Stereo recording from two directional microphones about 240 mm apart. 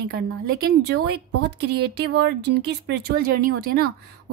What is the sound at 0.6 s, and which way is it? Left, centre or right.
Speech, right.